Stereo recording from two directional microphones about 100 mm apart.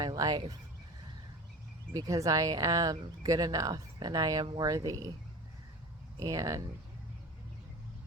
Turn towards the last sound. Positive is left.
turn(degrees=-35)  # may be behind; listen again after turning